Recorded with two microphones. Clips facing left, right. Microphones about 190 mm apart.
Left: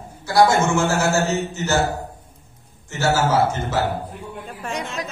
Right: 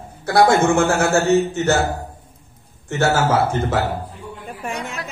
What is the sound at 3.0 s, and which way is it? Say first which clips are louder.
Speech: right 1 dB; 55° right (ahead or behind).